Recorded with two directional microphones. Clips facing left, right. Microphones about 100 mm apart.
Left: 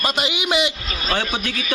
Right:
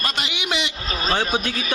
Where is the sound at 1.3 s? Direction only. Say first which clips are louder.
Right 1 dB; 35° right (ahead or behind).